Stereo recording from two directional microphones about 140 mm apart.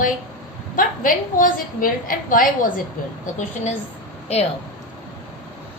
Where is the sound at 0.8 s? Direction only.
75° left (ahead or behind).